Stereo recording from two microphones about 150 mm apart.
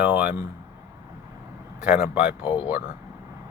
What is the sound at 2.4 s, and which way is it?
Speech, 35° left (ahead or behind).